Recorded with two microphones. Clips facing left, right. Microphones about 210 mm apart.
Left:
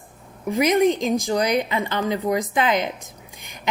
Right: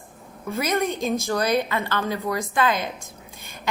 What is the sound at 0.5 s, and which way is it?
A woman's voice, 15° left (ahead or behind).